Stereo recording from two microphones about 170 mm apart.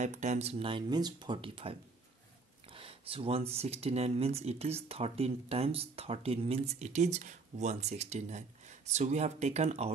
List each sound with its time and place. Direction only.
0.0 s speech: 45° right (ahead or behind)